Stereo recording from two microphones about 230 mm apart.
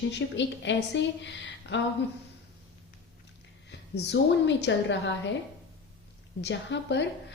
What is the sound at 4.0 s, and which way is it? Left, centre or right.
A woman's voice, left.